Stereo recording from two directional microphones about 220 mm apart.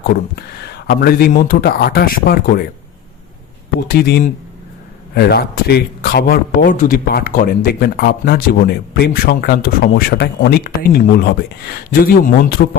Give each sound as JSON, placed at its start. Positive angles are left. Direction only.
{"t": 0.9, "sound": "a man's voice", "side_deg": 45}
{"t": 3.8, "sound": "a man's voice", "side_deg": 45}